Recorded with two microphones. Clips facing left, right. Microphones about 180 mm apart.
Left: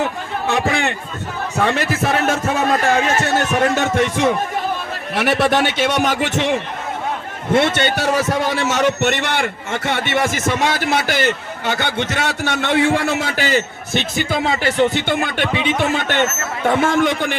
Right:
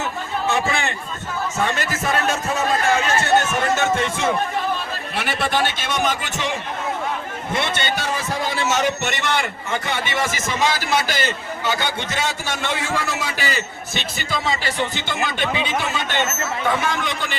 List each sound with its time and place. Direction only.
0.0 s a sound: 60° left (ahead or behind)
1.5 s music: 65° left (ahead or behind)
5.1 s a man's voice: 65° left (ahead or behind)
7.5 s a man's voice: 60° left (ahead or behind)